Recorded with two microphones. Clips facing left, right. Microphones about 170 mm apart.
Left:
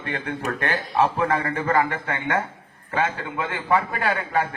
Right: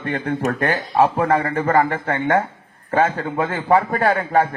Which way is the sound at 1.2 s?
25° right (ahead or behind).